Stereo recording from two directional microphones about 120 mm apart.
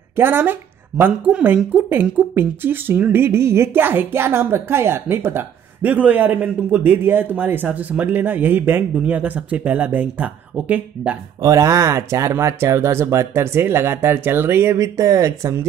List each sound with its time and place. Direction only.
0.1 s speech: 20° right (ahead or behind)
11.4 s speech: 25° right (ahead or behind)